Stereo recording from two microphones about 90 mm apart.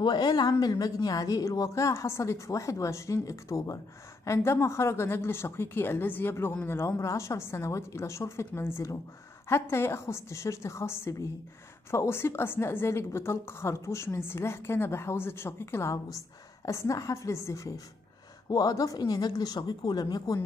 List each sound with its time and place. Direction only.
0.0 s a woman's voice: 55° left (ahead or behind)